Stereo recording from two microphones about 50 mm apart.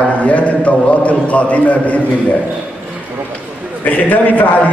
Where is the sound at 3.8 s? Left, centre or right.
Left.